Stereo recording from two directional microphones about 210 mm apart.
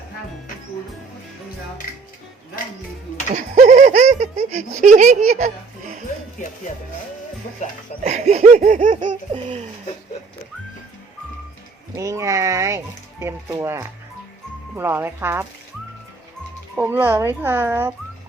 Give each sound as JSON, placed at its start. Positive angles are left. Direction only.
{"t": 3.3, "sound": "a sound", "side_deg": -35}
{"t": 8.0, "sound": "laughter", "side_deg": -30}
{"t": 9.3, "sound": "speech", "side_deg": -25}
{"t": 11.9, "sound": "speech", "side_deg": -15}
{"t": 16.7, "sound": "speech", "side_deg": -10}